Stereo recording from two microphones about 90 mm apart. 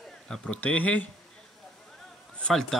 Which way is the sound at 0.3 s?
15° left (ahead or behind).